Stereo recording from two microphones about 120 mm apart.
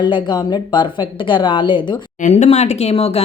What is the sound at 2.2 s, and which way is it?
Speech, 65° left (ahead or behind).